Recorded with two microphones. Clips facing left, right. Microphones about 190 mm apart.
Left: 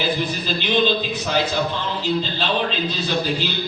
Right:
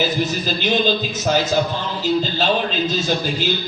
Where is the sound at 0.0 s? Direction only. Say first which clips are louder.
Right 3 dB; 45° right (ahead or behind).